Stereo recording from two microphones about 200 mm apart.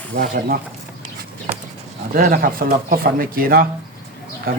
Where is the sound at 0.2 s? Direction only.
45° right (ahead or behind).